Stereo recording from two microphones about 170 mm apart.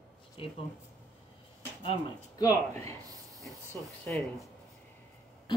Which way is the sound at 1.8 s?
25° left (ahead or behind).